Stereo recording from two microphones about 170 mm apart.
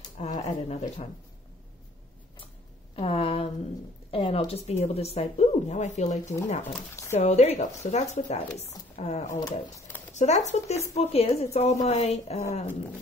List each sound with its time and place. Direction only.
0.2 s speech: 40° left (ahead or behind)
3.0 s a sound: 35° left (ahead or behind)
4.1 s speech: 30° left (ahead or behind)
6.6 s speech: 15° left (ahead or behind)
7.2 s speech: 40° left (ahead or behind)
9.3 s speech: 15° left (ahead or behind)
10.1 s speech: 40° left (ahead or behind)